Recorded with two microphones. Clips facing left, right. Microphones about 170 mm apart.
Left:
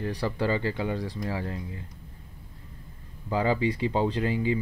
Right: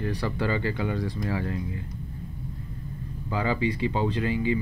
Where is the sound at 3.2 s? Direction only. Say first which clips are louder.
Left 1 dB; 35° left (ahead or behind).